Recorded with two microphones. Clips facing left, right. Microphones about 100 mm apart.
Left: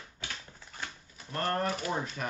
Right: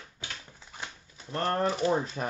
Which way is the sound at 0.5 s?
20° right (ahead or behind).